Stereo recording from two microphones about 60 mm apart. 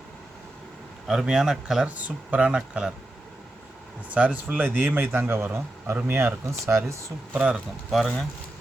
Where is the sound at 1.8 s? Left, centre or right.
Right.